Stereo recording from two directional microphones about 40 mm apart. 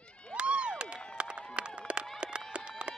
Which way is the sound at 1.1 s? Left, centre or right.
Right.